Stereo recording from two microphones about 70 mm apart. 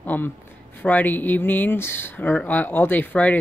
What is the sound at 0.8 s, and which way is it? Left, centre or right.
Speech, left.